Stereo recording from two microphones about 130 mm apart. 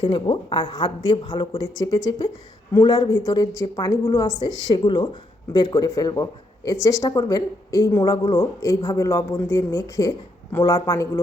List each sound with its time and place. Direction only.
0.0 s speech: 40° left (ahead or behind)